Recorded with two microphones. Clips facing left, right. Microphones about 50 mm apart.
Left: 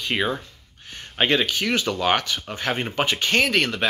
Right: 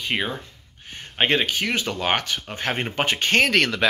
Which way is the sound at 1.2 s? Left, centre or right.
Right.